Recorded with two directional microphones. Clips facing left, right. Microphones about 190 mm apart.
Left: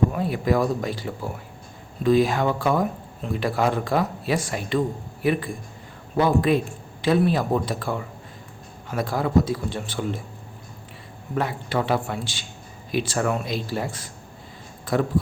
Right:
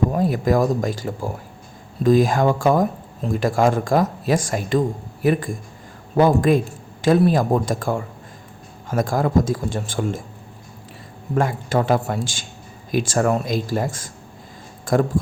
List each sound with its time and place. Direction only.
0.1 s speech: 40° right (ahead or behind)
11.3 s speech: 45° right (ahead or behind)